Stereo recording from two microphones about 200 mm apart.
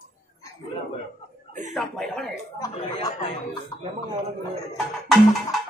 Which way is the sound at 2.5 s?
20° left (ahead or behind).